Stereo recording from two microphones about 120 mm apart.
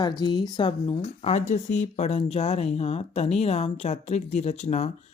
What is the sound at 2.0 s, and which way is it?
Speech, 55° left (ahead or behind).